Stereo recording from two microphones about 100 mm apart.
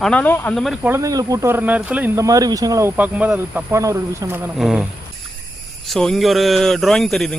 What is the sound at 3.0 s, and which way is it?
Speech, 15° right (ahead or behind).